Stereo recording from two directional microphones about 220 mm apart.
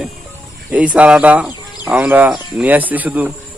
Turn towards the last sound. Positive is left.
turn(degrees=-5)  # may be behind; listen again after turning